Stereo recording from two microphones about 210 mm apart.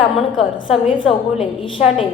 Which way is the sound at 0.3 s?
25° left (ahead or behind).